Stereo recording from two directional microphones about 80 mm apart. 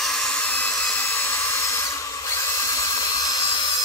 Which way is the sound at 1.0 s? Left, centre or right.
Left.